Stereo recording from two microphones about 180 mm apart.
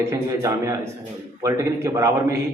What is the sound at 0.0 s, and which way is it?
A man's voice, 15° right (ahead or behind).